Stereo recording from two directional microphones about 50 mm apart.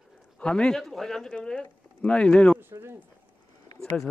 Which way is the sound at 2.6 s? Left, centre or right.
Right.